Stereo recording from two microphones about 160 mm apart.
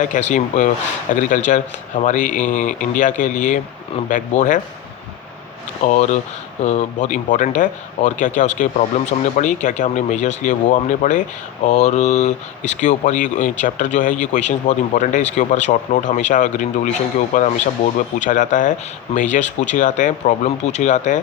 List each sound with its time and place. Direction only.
0.0 s speech: 50° left (ahead or behind)
5.8 s speech: 50° left (ahead or behind)